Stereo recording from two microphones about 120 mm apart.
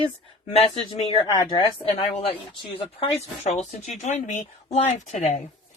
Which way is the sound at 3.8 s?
75° left (ahead or behind).